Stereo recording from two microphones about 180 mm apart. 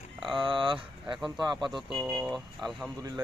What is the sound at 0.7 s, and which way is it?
Speech, 5° right (ahead or behind).